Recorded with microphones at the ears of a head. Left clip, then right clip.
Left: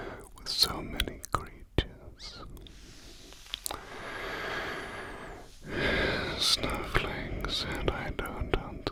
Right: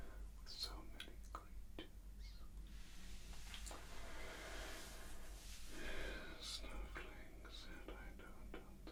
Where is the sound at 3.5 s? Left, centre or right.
Left.